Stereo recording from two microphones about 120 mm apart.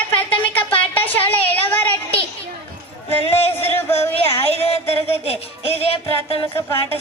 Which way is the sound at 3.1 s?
50° left (ahead or behind).